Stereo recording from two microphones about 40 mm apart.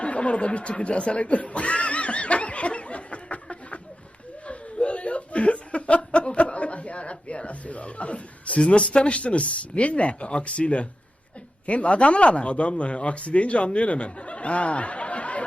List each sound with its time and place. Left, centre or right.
0.0 s speech: left
4.4 s chuckle: left
11.6 s speech: left